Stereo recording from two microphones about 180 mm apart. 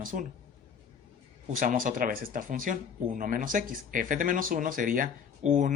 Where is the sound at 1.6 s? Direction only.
45° right (ahead or behind).